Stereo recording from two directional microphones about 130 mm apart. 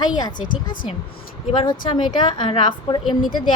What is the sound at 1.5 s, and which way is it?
A woman's voice, 30° left (ahead or behind).